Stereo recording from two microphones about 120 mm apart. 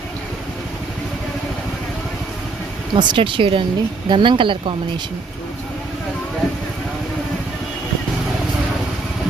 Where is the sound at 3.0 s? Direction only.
40° right (ahead or behind).